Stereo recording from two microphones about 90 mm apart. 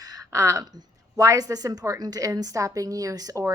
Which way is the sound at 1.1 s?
40° right (ahead or behind).